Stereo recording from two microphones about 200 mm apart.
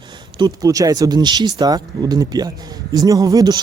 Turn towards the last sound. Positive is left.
turn(degrees=-20)  # may be behind; listen again after turning